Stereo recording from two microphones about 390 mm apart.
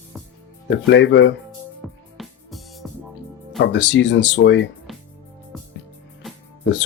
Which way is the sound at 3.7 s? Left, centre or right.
Left.